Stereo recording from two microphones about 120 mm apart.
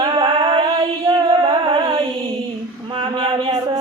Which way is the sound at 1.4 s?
40° right (ahead or behind).